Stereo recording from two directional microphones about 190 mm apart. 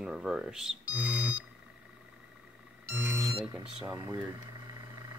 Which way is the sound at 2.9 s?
10° right (ahead or behind).